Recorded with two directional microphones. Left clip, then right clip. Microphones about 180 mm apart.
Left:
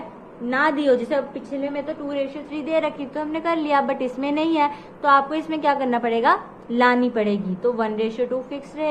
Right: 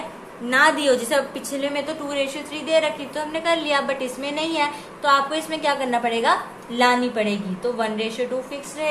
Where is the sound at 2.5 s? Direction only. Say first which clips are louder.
Right 2 dB; 25° left (ahead or behind).